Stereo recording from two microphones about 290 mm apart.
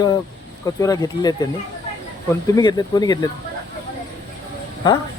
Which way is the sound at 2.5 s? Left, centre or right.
Centre.